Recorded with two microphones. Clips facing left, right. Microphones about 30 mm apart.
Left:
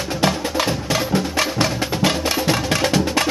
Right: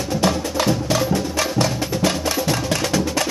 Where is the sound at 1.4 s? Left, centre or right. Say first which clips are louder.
Left 1 dB; left.